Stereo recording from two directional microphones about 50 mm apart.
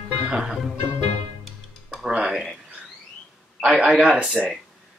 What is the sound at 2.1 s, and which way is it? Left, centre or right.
Speech, centre.